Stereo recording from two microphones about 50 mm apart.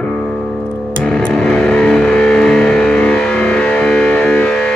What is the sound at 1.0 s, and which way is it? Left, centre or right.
Music, centre.